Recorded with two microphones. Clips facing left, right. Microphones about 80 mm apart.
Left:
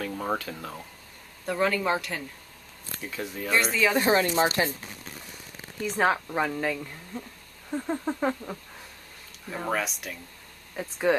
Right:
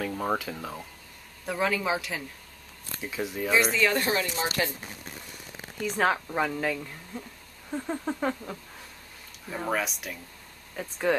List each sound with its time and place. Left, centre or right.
0.0 s a woman's voice: centre
4.1 s speech: left
5.9 s a woman's voice: centre